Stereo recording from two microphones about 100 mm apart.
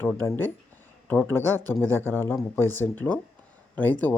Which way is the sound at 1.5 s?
20° left (ahead or behind).